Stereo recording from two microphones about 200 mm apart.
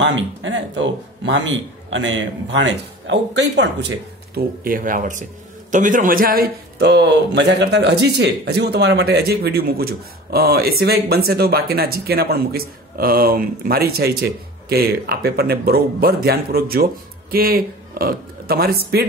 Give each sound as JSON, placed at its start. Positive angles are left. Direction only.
{"t": 0.0, "sound": "speech", "side_deg": -65}
{"t": 4.4, "sound": "a man's voice", "side_deg": -45}